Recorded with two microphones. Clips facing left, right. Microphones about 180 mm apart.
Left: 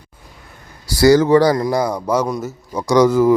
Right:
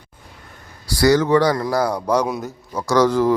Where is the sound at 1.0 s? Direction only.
30° left (ahead or behind).